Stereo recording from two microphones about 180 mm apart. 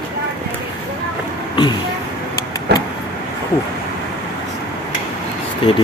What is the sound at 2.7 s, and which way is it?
Vehicle, 65° right (ahead or behind).